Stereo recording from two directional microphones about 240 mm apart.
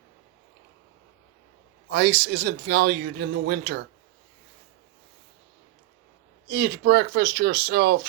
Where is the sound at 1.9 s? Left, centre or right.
Right.